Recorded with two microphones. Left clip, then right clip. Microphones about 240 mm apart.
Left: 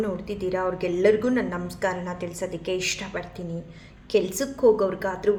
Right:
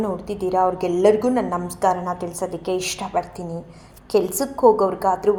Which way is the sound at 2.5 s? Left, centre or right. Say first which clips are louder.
Right 2 dB; centre.